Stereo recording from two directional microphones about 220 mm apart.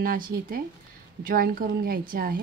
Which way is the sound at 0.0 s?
40° right (ahead or behind).